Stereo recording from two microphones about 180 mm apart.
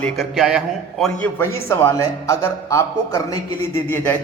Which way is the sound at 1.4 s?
15° left (ahead or behind).